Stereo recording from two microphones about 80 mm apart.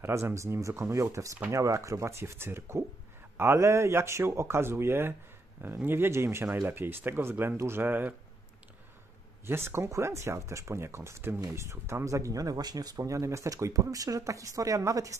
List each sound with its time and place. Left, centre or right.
0.0 s speech: right
9.5 s speech: right